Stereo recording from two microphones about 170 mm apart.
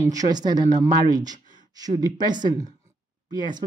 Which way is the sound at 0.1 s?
20° right (ahead or behind).